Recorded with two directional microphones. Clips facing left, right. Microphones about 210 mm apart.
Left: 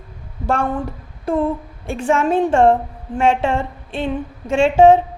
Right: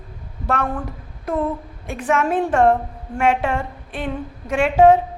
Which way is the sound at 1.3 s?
30° left (ahead or behind).